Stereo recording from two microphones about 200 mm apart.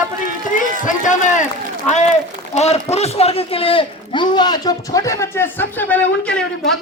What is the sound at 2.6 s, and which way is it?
Speech, 30° left (ahead or behind).